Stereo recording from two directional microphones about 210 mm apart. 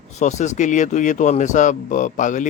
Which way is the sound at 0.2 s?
35° left (ahead or behind).